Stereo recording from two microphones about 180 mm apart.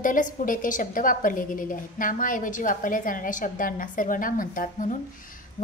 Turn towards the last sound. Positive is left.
turn(degrees=45)  # may be behind; listen again after turning